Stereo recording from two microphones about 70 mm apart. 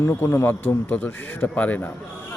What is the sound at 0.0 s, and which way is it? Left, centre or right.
Speech, left.